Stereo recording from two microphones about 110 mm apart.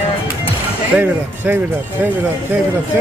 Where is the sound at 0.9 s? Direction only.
20° right (ahead or behind).